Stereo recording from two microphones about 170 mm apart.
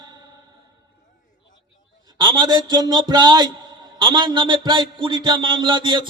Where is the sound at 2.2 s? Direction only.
25° right (ahead or behind).